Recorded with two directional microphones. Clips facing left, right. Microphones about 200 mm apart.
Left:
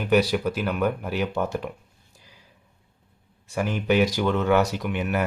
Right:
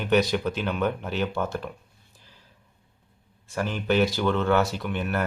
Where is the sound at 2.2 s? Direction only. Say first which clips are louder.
Left 2 dB; 10° left (ahead or behind).